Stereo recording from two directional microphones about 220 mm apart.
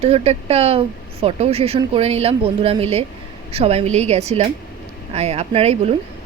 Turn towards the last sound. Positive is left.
turn(degrees=-30)  # may be behind; listen again after turning